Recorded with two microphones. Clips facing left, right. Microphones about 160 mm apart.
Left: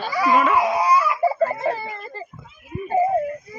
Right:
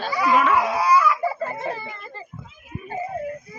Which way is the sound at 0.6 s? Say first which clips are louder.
Left 1 dB; 20° left (ahead or behind).